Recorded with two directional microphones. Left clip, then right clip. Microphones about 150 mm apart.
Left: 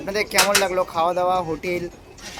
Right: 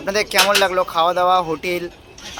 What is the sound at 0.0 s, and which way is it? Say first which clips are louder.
Speech: right 3 dB; 5° left (ahead or behind).